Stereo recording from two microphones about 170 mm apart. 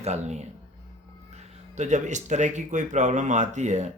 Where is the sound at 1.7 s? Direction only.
45° right (ahead or behind).